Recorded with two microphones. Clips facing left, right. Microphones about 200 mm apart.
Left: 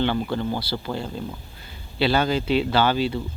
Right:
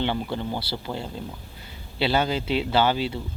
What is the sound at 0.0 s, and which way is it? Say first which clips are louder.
Speech: left 3 dB; 20° right (ahead or behind).